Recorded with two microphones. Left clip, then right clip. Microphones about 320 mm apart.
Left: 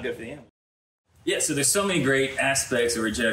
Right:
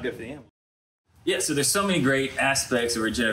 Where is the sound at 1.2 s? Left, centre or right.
Centre.